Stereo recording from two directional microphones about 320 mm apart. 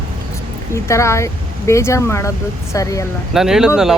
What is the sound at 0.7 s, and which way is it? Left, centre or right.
Speech, centre.